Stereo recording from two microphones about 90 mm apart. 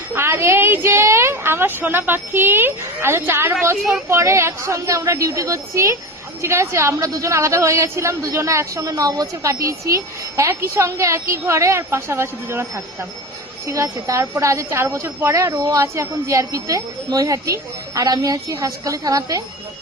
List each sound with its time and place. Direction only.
0.1 s a woman's voice: 30° right (ahead or behind)